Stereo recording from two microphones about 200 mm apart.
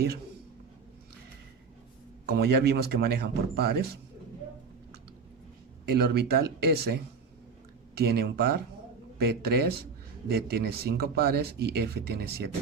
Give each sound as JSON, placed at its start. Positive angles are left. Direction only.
{"t": 2.2, "sound": "speech", "side_deg": -55}
{"t": 5.9, "sound": "speech", "side_deg": -55}